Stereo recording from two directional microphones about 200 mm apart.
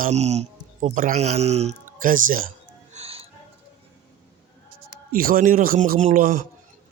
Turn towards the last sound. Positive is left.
turn(degrees=-40)  # may be behind; listen again after turning